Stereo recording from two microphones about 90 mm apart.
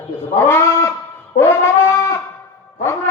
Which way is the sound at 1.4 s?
30° left (ahead or behind).